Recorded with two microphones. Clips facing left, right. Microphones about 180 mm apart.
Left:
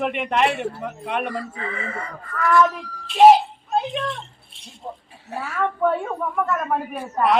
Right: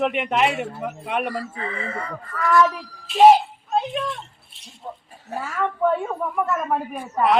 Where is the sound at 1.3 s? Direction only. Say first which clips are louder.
Even; 35° right (ahead or behind).